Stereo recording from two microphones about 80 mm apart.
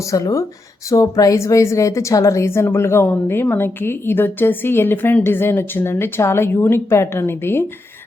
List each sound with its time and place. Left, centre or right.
0.1 s a woman's voice: left